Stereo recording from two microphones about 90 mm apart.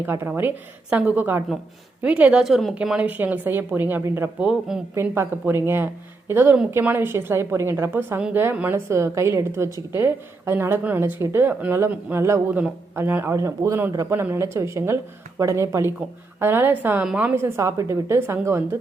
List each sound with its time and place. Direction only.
0.0 s a woman's voice: 25° right (ahead or behind)
2.4 s a woman's voice: centre (ahead or behind)
3.0 s a woman's voice: 20° right (ahead or behind)
4.4 s speech: 10° right (ahead or behind)
4.9 s a woman's voice: 30° right (ahead or behind)
13.3 s a woman's voice: 35° right (ahead or behind)
17.0 s speech: 10° right (ahead or behind)
17.3 s a woman's voice: 30° right (ahead or behind)